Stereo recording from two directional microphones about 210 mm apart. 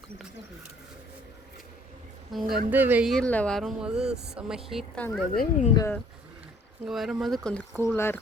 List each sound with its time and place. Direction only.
2.3 s speech: centre (ahead or behind)
3.1 s speech: 5° left (ahead or behind)
5.3 s speech: 45° left (ahead or behind)
5.7 s speech: 15° left (ahead or behind)
6.8 s speech: centre (ahead or behind)